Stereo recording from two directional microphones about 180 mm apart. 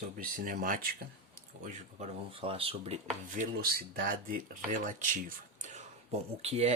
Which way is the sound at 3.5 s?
55° right (ahead or behind).